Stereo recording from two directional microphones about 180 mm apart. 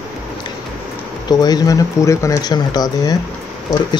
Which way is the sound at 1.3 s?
20° left (ahead or behind).